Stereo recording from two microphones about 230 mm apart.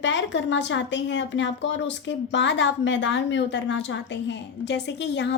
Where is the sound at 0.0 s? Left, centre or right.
Left.